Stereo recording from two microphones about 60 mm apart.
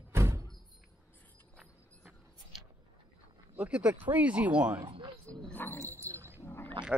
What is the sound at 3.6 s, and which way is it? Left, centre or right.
Speech, centre.